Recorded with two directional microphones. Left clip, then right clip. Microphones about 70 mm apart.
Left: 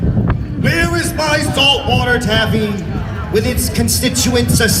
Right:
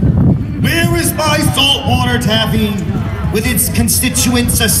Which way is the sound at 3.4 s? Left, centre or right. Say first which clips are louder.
Even; left.